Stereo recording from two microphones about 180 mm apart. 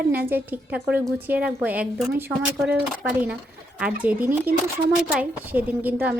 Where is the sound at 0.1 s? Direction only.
10° right (ahead or behind).